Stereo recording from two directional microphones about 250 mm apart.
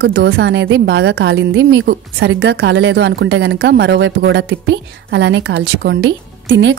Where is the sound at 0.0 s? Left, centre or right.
Right.